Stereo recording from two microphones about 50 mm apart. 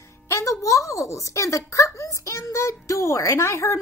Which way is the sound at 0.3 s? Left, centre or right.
Left.